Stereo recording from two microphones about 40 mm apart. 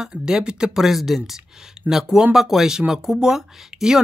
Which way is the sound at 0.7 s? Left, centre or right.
Centre.